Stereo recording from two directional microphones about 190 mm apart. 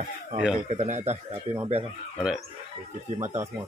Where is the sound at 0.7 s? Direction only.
35° right (ahead or behind).